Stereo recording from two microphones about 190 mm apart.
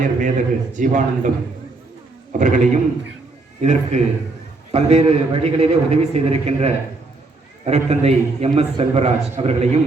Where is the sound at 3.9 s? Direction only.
35° right (ahead or behind).